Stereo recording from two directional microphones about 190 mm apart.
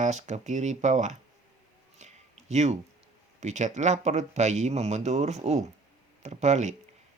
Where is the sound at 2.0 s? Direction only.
35° right (ahead or behind).